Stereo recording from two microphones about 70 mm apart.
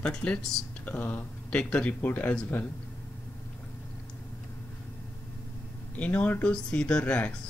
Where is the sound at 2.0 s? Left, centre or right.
Left.